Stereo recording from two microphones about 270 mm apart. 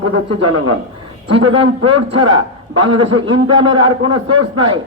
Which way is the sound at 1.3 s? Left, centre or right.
Centre.